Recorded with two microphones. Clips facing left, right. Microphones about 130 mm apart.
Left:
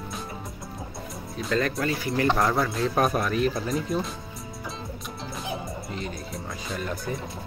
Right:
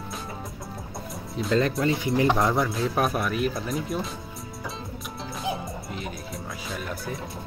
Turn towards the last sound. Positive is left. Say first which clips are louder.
# left 2 dB
turn(degrees=0)  # may be behind; listen again after turning